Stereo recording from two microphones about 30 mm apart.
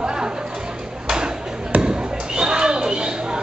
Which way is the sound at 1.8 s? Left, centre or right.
Right.